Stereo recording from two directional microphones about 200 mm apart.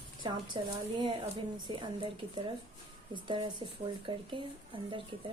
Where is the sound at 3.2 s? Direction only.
25° right (ahead or behind).